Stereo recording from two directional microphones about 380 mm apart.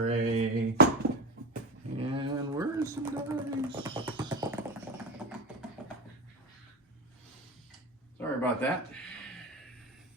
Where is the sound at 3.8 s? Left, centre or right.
Centre.